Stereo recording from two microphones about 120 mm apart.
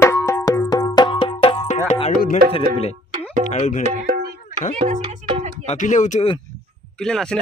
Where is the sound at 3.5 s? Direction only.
80° left.